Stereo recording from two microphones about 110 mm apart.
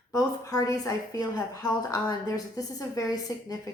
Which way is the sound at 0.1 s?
30° left (ahead or behind).